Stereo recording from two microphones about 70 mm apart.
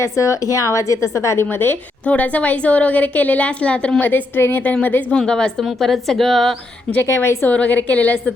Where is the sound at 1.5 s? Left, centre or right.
Left.